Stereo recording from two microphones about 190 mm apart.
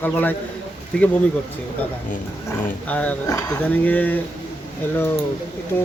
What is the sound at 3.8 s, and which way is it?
Speech, 10° left (ahead or behind).